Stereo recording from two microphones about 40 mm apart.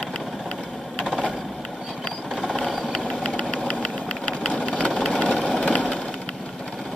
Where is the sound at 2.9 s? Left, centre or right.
Centre.